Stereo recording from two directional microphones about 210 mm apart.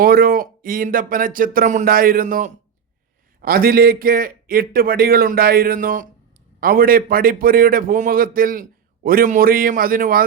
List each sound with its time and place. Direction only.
0.0 s a man's voice: 45° right (ahead or behind)